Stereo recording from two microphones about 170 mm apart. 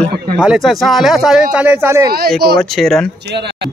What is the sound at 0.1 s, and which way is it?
Speech, 70° right (ahead or behind).